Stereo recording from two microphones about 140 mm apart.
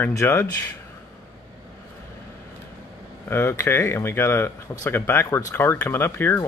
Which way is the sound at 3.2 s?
15° left (ahead or behind).